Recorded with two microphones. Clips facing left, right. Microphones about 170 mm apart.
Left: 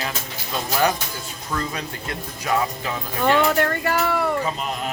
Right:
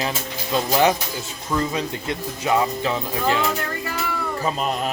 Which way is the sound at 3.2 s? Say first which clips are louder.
Left 6 dB; 65° left (ahead or behind).